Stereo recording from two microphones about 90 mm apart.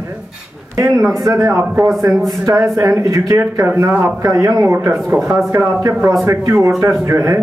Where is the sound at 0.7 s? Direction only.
40° right (ahead or behind).